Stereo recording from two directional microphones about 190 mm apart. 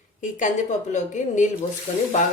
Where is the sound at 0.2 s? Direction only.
40° left (ahead or behind).